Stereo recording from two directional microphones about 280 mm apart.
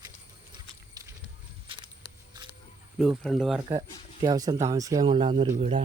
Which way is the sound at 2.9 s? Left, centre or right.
Centre.